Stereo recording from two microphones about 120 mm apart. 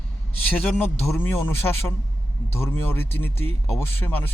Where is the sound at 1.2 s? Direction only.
20° left (ahead or behind).